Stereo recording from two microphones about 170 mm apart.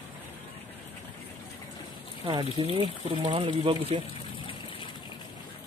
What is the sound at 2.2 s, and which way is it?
Speech, 30° right (ahead or behind).